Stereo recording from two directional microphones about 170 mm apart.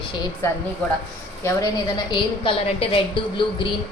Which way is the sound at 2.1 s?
30° left (ahead or behind).